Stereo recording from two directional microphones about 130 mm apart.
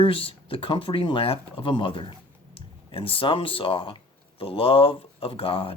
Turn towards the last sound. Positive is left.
turn(degrees=45)  # may be behind; listen again after turning